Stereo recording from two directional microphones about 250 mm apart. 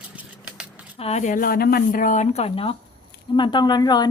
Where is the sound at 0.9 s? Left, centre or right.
Left.